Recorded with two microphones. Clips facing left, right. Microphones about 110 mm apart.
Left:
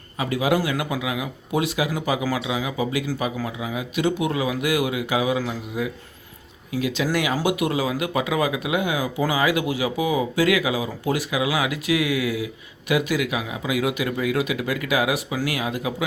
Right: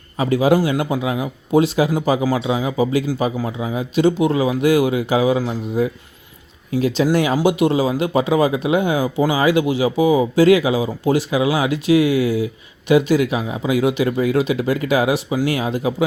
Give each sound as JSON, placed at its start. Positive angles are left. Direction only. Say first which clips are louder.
{"t": 0.2, "sound": "speech", "louder": "right 6 dB", "side_deg": -30}